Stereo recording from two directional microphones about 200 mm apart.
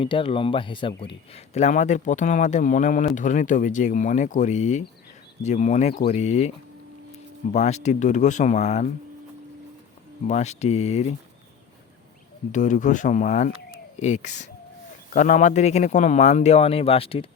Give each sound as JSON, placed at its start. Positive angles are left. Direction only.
{"t": 0.0, "sound": "speech", "side_deg": 25}
{"t": 7.5, "sound": "speech", "side_deg": 35}
{"t": 10.2, "sound": "speech", "side_deg": 35}
{"t": 12.5, "sound": "speech", "side_deg": 40}